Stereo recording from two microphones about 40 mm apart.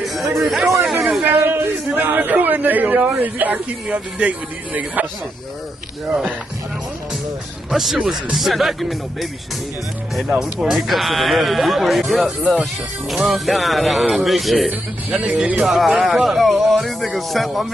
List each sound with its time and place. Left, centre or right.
0.0 s a sound: centre
1.2 s a sound: right
2.0 s a man's voice: right
3.5 s speech: right
7.7 s speech: centre
10.4 s speech: centre
12.3 s speech: right
13.1 s speech: centre